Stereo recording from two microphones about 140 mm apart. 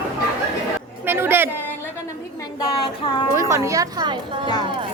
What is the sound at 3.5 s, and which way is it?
A woman's voice, 20° right (ahead or behind).